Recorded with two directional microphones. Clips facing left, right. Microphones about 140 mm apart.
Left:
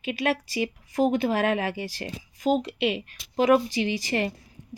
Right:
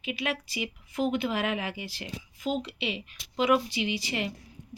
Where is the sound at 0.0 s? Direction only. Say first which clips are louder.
Left 6 dB; 45° left (ahead or behind).